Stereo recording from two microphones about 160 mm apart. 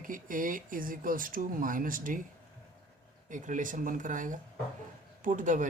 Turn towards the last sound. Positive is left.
turn(degrees=-55)  # may be behind; listen again after turning